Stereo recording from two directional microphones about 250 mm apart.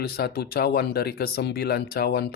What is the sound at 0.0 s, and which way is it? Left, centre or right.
Speech, left.